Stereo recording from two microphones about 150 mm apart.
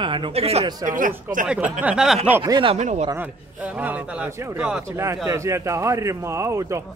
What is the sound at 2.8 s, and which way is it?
Speech, 50° right (ahead or behind).